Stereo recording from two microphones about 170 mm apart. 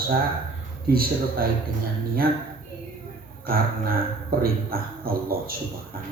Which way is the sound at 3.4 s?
60° right (ahead or behind).